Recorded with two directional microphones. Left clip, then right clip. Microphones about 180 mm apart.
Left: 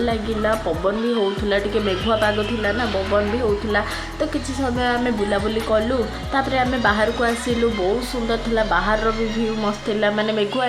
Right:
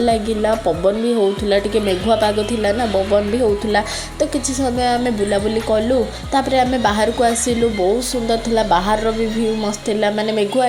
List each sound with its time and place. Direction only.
0.0 s a woman's voice: 40° right (ahead or behind)
8.3 s a woman's voice: 40° right (ahead or behind)